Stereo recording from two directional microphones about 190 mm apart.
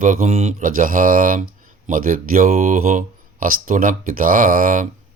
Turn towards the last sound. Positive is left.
turn(degrees=-45)  # may be behind; listen again after turning